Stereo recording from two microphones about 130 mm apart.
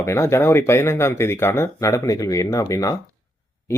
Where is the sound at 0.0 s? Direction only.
20° left (ahead or behind).